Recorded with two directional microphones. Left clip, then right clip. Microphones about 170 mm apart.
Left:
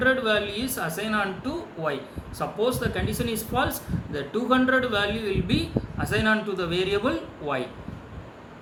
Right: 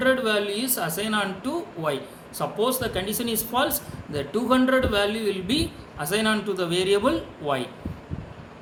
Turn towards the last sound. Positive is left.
turn(degrees=-55)  # may be behind; listen again after turning